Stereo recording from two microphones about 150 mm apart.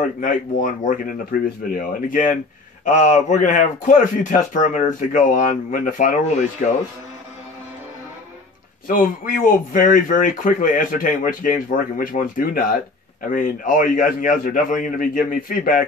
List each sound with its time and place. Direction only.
0.2 s a man's voice: 60° left (ahead or behind)
8.8 s a man's voice: 65° left (ahead or behind)